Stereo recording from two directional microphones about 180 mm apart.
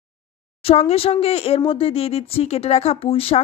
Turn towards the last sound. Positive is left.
turn(degrees=30)  # may be behind; listen again after turning